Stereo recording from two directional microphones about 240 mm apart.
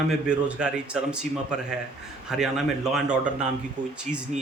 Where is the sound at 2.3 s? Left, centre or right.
Centre.